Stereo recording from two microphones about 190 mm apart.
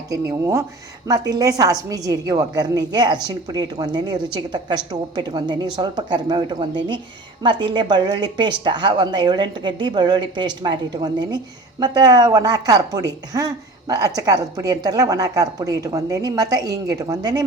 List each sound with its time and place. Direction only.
0.1 s a woman's voice: 15° right (ahead or behind)